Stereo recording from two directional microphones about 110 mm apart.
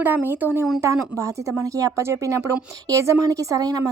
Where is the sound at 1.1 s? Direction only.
30° right (ahead or behind).